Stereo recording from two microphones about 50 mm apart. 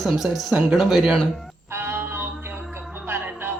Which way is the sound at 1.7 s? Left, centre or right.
Right.